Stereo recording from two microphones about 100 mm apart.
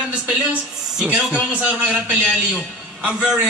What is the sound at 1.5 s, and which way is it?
A man's voice, 15° right (ahead or behind).